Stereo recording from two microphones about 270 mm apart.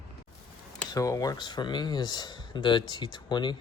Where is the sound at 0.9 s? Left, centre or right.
Centre.